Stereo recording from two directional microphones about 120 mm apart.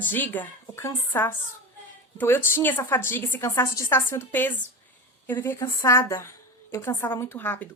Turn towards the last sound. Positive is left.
turn(degrees=15)  # may be behind; listen again after turning